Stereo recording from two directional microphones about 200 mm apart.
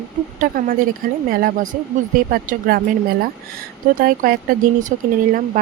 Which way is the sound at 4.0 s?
45° right (ahead or behind).